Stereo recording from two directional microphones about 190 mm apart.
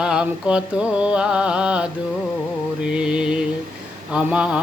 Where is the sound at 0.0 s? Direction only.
5° right (ahead or behind).